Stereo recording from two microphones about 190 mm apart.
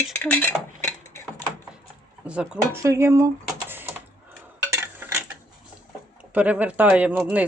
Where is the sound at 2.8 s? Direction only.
15° right (ahead or behind).